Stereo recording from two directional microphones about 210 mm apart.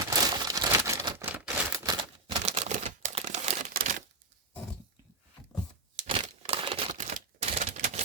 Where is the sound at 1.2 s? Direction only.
10° right (ahead or behind).